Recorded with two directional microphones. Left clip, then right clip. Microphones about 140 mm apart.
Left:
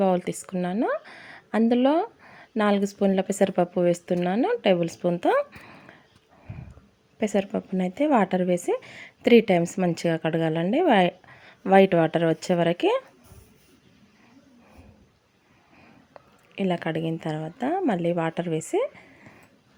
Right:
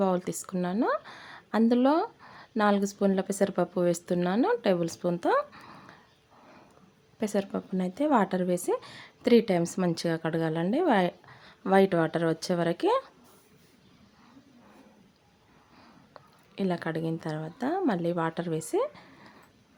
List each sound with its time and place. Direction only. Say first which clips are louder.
0.0 s a sound: left 5 dB; 15° left (ahead or behind)
0.4 s speech: left 2 dB; 10° left (ahead or behind)
7.2 s a woman's voice: left 5 dB; 20° left (ahead or behind)
16.1 s speech: left 4 dB; 15° left (ahead or behind)